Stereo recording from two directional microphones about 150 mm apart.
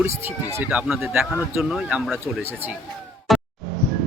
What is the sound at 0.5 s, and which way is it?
Speech, 10° right (ahead or behind).